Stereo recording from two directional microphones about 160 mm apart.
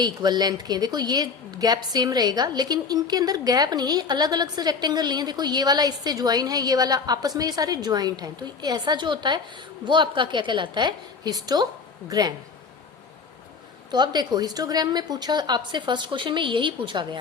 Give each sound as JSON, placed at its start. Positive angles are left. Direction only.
{"t": 0.0, "sound": "a woman's voice", "side_deg": -25}
{"t": 13.9, "sound": "a woman's voice", "side_deg": -25}